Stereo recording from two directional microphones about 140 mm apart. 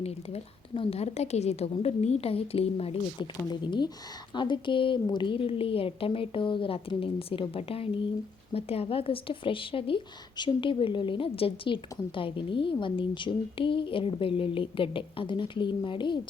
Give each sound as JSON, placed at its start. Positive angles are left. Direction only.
{"t": 0.0, "sound": "a woman's voice", "side_deg": 40}
{"t": 3.5, "sound": "speech", "side_deg": 30}